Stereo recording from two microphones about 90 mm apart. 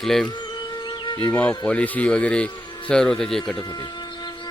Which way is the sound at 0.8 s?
60° left (ahead or behind).